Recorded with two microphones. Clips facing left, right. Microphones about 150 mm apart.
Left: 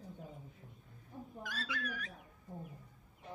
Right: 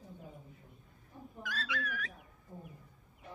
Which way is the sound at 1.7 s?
90° right.